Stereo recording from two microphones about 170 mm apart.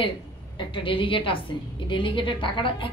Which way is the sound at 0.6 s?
30° left (ahead or behind).